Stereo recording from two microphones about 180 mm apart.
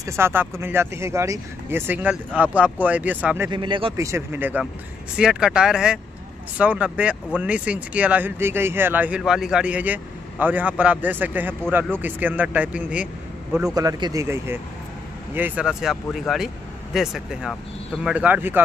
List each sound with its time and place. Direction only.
0.0 s speech: 15° right (ahead or behind)
3.5 s speech: 25° right (ahead or behind)
3.9 s speech: 15° right (ahead or behind)
13.7 s speech: 25° right (ahead or behind)